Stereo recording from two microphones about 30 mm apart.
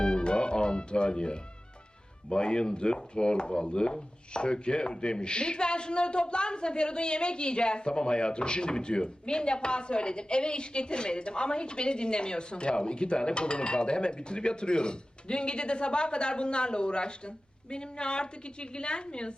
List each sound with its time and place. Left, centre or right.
0.0 s music: left
2.3 s a man's voice: left